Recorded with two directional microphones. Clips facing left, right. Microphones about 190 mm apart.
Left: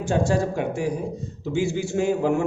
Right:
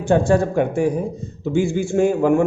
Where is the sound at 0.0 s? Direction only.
60° right (ahead or behind).